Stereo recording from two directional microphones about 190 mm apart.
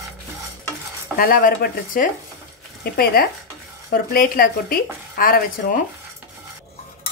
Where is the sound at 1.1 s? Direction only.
50° left (ahead or behind).